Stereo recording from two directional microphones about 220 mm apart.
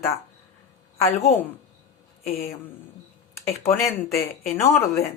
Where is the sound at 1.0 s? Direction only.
30° left (ahead or behind).